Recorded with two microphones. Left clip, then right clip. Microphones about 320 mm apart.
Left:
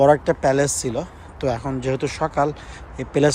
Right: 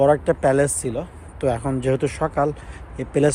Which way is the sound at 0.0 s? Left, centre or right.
Centre.